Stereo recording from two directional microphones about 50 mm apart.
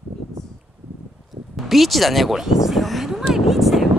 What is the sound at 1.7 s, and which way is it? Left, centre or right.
Speech, centre.